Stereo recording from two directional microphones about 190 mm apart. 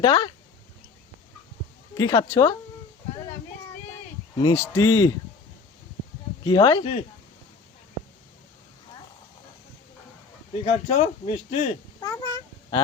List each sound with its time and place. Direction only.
0.0 s a man's voice: 20° left (ahead or behind)
2.0 s a man's voice: 20° left (ahead or behind)
4.4 s a man's voice: 20° left (ahead or behind)
6.4 s speech: 20° left (ahead or behind)
10.6 s speech: 35° left (ahead or behind)
11.9 s cat: 20° left (ahead or behind)